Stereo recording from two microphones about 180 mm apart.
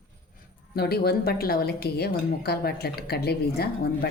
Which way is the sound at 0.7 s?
60° left (ahead or behind).